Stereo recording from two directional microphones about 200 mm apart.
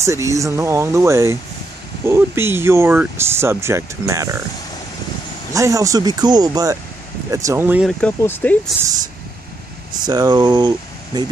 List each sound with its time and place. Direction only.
0.0 s speech: 15° right (ahead or behind)
5.5 s speech: 15° right (ahead or behind)
8.0 s speech: 10° left (ahead or behind)
9.9 s speech: 20° right (ahead or behind)